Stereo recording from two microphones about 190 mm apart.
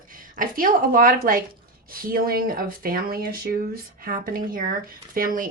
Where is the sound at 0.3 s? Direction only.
45° right (ahead or behind).